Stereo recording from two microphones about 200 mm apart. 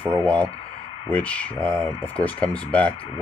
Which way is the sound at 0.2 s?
5° left (ahead or behind).